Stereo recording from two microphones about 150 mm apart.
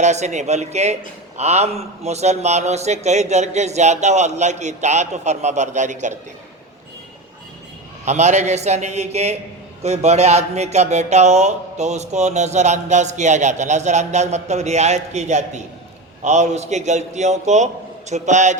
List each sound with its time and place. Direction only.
0.0 s speech: 50° right (ahead or behind)
8.0 s speech: 50° right (ahead or behind)